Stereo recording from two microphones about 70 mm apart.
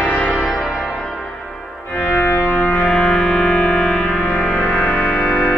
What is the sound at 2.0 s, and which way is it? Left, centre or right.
Music, left.